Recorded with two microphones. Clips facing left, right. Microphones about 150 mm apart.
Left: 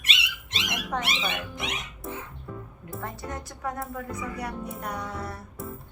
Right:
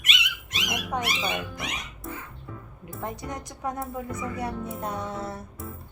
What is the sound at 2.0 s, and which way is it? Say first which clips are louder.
Music: left 1 dB; centre (ahead or behind).